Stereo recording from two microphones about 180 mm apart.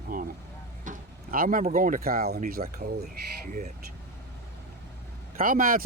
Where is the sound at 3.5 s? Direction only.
45° right (ahead or behind).